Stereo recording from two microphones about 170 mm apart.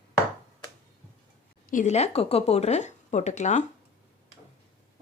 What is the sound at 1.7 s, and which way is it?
Speech, 45° left (ahead or behind).